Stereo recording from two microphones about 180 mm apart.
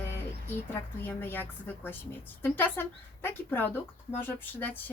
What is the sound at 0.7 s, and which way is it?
Speech, 10° left (ahead or behind).